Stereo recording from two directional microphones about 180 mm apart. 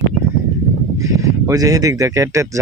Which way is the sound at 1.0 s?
20° right (ahead or behind).